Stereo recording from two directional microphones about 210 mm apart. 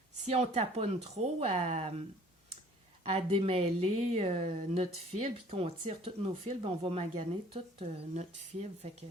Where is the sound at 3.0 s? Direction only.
30° right (ahead or behind).